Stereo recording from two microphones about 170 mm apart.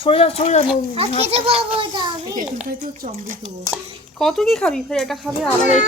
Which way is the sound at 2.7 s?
50° right (ahead or behind).